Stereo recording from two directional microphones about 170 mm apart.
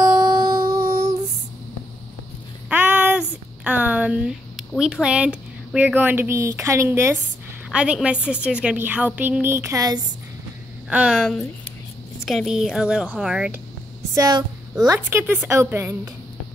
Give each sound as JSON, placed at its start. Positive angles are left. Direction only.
{"t": 0.0, "sound": "music", "side_deg": -20}
{"t": 2.7, "sound": "a sound", "side_deg": -10}
{"t": 7.7, "sound": "a woman's voice", "side_deg": -5}
{"t": 10.9, "sound": "a woman's voice", "side_deg": -5}
{"t": 14.1, "sound": "speech", "side_deg": -20}
{"t": 14.9, "sound": "a woman's voice", "side_deg": -10}